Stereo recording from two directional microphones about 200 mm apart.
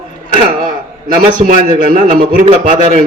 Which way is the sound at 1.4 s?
40° right (ahead or behind).